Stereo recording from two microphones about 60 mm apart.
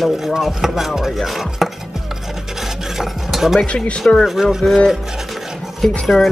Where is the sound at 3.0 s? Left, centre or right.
Centre.